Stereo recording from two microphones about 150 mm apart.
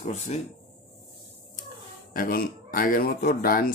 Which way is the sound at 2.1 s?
70° left (ahead or behind).